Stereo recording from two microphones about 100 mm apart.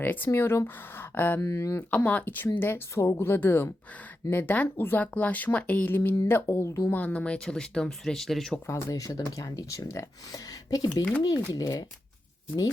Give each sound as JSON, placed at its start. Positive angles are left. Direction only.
{"t": 0.0, "sound": "speech", "side_deg": 20}
{"t": 1.4, "sound": "speech", "side_deg": 35}
{"t": 1.9, "sound": "speech", "side_deg": 15}
{"t": 6.9, "sound": "speech", "side_deg": 15}
{"t": 8.6, "sound": "speech", "side_deg": 30}